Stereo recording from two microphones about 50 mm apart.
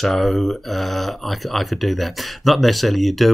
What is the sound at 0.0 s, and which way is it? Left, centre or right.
Speech, centre.